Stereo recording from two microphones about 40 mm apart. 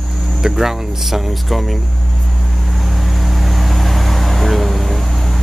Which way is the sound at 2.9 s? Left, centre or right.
Centre.